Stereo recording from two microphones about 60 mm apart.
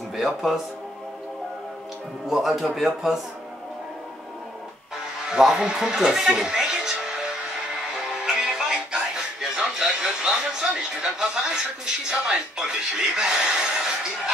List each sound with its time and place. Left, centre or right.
2.2 s a man's voice: centre
5.3 s speech: centre
7.9 s music: centre